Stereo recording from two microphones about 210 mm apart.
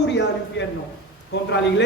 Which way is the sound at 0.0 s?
55° left (ahead or behind).